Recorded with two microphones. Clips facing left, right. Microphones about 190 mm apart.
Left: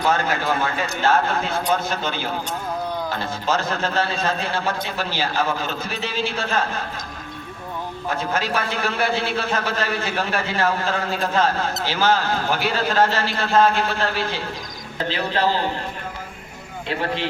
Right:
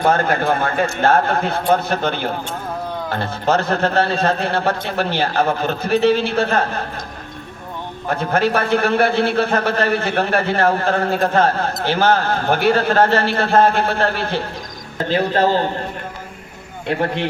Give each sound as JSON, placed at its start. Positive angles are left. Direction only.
{"t": 0.0, "sound": "a man's voice", "side_deg": -55}
{"t": 8.1, "sound": "a man's voice", "side_deg": -60}
{"t": 15.1, "sound": "a man's voice", "side_deg": -45}